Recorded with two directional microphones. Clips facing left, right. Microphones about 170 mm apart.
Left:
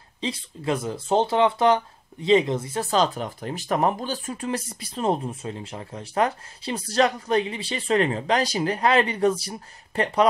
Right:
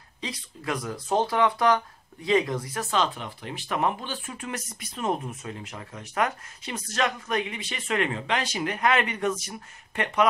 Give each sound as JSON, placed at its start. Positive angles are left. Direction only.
{"t": 0.2, "sound": "speech", "side_deg": 25}